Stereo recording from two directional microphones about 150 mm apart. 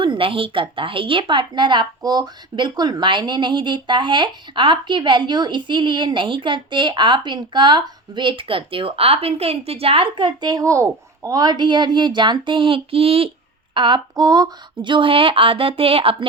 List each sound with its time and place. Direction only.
0.0 s a woman's voice: 35° right (ahead or behind)